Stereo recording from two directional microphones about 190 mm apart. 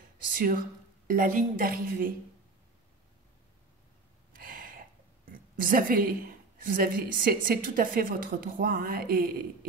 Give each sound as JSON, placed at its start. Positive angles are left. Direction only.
{"t": 1.0, "sound": "a woman's voice", "side_deg": -45}
{"t": 4.3, "sound": "a sound", "side_deg": -50}
{"t": 5.3, "sound": "a woman's voice", "side_deg": -50}